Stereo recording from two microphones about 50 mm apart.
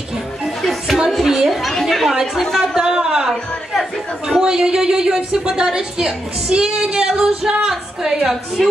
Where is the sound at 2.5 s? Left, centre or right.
Centre.